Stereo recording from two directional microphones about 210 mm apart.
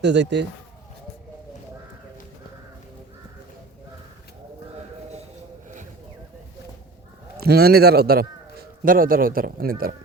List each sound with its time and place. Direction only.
0.0 s speech: 55° right (ahead or behind)
5.6 s a sound: 35° right (ahead or behind)
7.3 s a man's voice: 50° right (ahead or behind)